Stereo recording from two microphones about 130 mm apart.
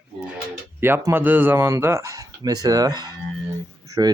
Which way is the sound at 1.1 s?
15° right (ahead or behind).